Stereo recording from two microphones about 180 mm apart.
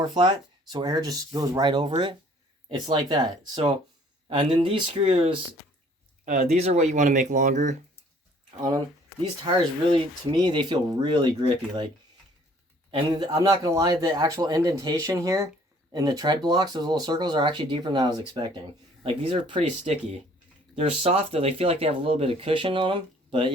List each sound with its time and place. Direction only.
0.0 s speech: 25° right (ahead or behind); by 7.8 s 40° right (ahead or behind)
8.4 s speech: 25° right (ahead or behind)
12.9 s speech: 25° right (ahead or behind)